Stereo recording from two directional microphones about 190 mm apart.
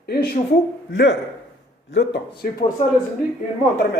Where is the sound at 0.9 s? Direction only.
65° left (ahead or behind).